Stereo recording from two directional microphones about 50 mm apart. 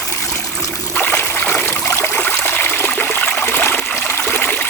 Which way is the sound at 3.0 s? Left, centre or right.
Left.